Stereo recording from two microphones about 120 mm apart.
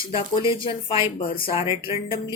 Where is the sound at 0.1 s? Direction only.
45° left (ahead or behind).